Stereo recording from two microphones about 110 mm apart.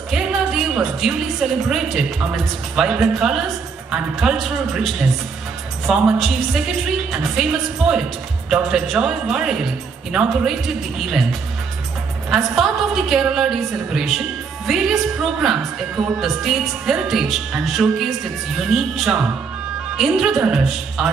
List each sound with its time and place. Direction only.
0.1 s music: 5° right (ahead or behind)
1.7 s a woman's voice: centre (ahead or behind)
12.3 s a woman's voice: centre (ahead or behind)